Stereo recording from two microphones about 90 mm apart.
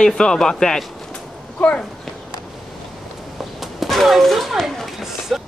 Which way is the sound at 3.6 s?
Centre (ahead or behind).